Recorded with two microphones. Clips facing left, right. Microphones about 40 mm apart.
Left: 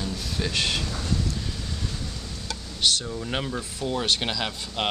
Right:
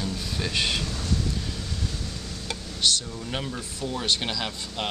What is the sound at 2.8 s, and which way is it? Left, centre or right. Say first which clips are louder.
Speech: left 1 dB; centre.